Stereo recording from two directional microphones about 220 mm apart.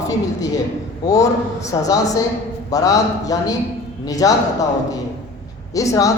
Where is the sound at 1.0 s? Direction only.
15° left (ahead or behind).